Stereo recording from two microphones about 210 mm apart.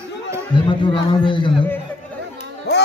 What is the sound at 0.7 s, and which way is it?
Speech, 20° left (ahead or behind).